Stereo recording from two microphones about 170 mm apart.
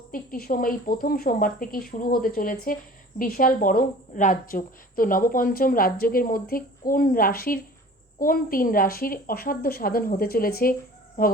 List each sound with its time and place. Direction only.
0.1 s a woman's voice: 55° left (ahead or behind)